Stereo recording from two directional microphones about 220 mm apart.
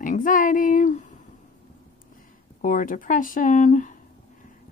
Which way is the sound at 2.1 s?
40° left (ahead or behind).